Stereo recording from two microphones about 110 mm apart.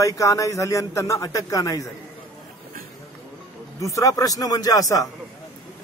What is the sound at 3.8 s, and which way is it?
Speech, 30° left (ahead or behind).